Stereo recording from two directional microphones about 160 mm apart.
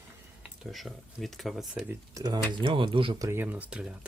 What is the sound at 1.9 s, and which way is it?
Speech, 20° right (ahead or behind).